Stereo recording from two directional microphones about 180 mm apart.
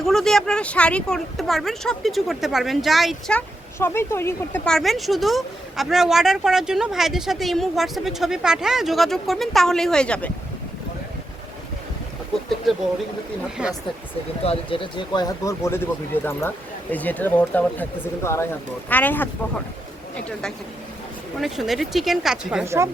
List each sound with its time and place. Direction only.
0.0 s speech: centre (ahead or behind)
13.6 s speech: 5° right (ahead or behind)
14.4 s speech: 30° left (ahead or behind); by 19.3 s 10° left (ahead or behind)
21.4 s speech: centre (ahead or behind)
22.6 s speech: 15° right (ahead or behind)